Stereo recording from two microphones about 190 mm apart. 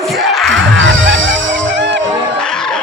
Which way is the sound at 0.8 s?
90° right.